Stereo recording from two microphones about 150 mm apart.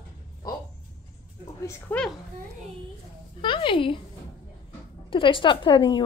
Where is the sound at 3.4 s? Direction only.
35° left (ahead or behind).